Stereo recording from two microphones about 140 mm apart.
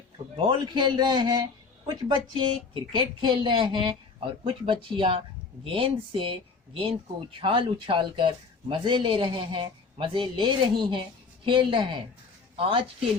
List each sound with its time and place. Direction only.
0.4 s speech: 35° right (ahead or behind)